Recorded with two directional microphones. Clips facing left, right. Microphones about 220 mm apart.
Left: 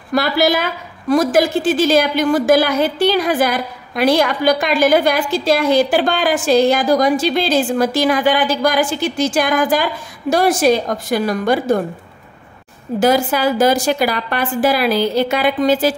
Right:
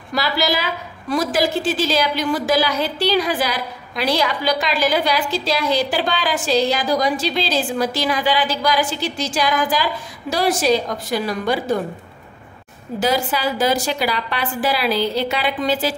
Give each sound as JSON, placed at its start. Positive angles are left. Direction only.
{"t": 0.1, "sound": "a woman's voice", "side_deg": 50}
{"t": 13.0, "sound": "a woman's voice", "side_deg": 50}